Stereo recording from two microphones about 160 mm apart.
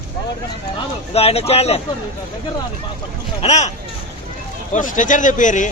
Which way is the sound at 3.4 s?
45° left (ahead or behind).